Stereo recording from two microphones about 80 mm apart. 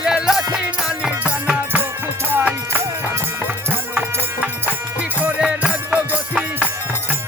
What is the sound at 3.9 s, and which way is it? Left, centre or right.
Music, centre.